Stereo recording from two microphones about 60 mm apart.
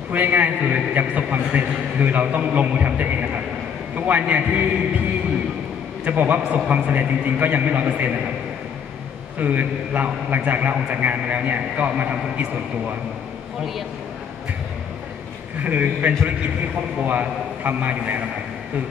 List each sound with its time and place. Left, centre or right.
0.1 s a man's voice: right
6.0 s a man's voice: right
9.4 s a man's voice: right
15.6 s a man's voice: right